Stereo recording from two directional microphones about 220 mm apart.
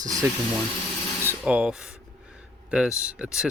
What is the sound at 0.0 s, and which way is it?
Speech, 15° right (ahead or behind).